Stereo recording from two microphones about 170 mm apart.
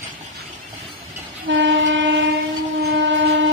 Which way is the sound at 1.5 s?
90° right.